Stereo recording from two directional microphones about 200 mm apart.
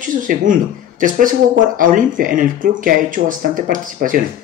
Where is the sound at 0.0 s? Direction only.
40° right (ahead or behind).